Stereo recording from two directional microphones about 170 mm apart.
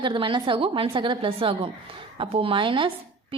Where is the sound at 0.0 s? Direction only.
30° right (ahead or behind).